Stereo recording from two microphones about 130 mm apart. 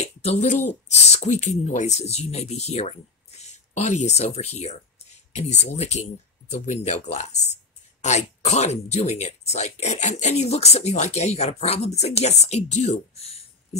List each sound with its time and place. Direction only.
0.0 s speech: 55° left (ahead or behind)